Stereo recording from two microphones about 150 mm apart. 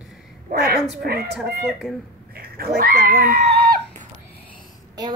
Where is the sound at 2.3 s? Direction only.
85° right.